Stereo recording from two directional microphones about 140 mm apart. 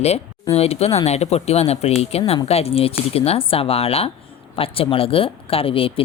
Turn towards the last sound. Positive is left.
turn(degrees=40)  # may be behind; listen again after turning